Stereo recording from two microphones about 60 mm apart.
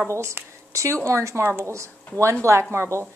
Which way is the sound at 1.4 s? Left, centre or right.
Right.